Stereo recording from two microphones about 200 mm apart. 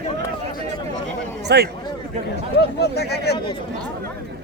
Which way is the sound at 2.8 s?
55° left (ahead or behind).